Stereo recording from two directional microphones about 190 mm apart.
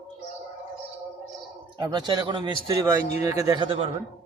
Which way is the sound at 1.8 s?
25° right (ahead or behind).